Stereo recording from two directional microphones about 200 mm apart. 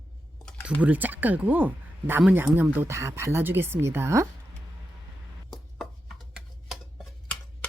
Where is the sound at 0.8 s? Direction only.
10° right (ahead or behind).